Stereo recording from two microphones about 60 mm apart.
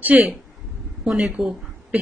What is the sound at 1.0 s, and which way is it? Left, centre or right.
Speech, centre.